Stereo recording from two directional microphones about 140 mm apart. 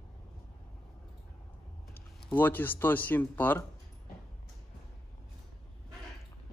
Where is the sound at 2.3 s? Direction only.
15° left (ahead or behind).